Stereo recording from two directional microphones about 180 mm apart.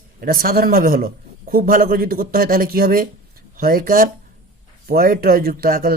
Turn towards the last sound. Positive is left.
turn(degrees=-55)  # may be behind; listen again after turning